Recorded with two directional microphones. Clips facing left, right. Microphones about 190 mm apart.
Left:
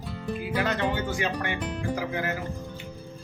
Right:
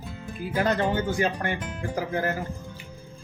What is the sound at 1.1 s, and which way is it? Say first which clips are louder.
Speech: right 3 dB; 40° right (ahead or behind).